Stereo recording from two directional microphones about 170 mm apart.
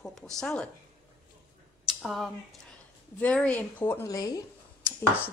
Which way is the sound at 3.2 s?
10° left (ahead or behind).